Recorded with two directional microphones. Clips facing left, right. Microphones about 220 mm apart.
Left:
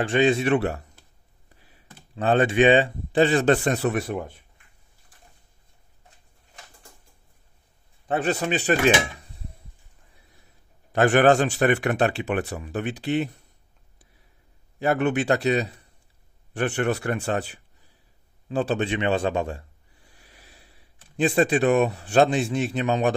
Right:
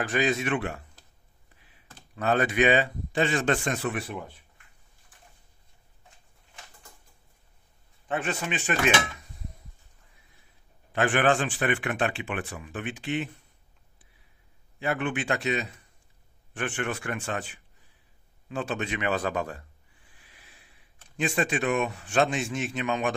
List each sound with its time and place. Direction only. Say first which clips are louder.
0.0 s speech: left 6 dB; 30° left (ahead or behind)
2.1 s speech: left 5 dB; 30° left (ahead or behind)
8.1 s speech: left 6 dB; 35° left (ahead or behind)
10.9 s speech: left 6 dB; 40° left (ahead or behind)
14.8 s a man's voice: left 7 dB; 40° left (ahead or behind)
20.0 s speech: left 6 dB; 40° left (ahead or behind)